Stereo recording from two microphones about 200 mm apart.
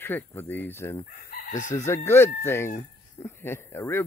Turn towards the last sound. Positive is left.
turn(degrees=10)  # may be behind; listen again after turning